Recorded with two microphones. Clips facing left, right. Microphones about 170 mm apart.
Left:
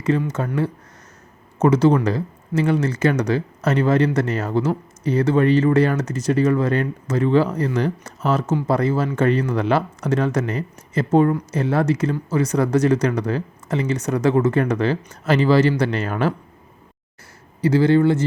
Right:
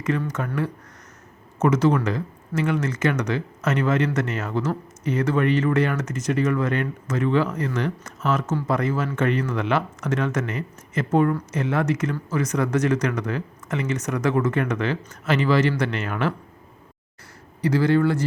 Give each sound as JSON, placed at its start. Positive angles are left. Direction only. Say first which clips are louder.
{"t": 0.3, "sound": "speech", "louder": "left 4 dB", "side_deg": 30}
{"t": 17.6, "sound": "speech", "louder": "left 4 dB", "side_deg": 25}